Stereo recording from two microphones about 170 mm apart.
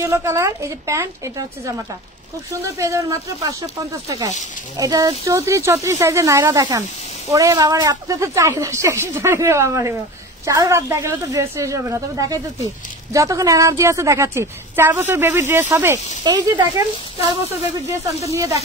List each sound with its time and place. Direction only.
0.0 s a woman's voice: 15° right (ahead or behind)
2.6 s a woman's voice: 20° right (ahead or behind)
18.2 s a woman's voice: 15° right (ahead or behind)